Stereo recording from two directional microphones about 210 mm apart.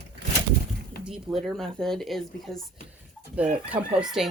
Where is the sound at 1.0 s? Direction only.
Centre (ahead or behind).